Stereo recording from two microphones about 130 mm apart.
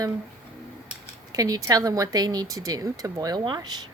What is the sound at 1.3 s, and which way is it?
Speech, 30° right (ahead or behind).